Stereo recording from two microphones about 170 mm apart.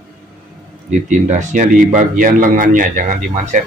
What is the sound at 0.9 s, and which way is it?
A man's voice, 50° right (ahead or behind).